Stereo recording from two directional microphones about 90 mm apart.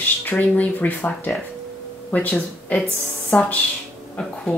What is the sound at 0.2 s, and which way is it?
A woman's voice, 20° left (ahead or behind).